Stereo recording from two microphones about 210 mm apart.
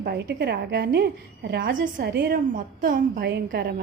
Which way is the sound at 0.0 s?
50° right (ahead or behind).